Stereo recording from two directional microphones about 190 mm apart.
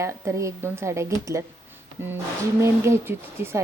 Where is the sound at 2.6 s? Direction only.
15° right (ahead or behind).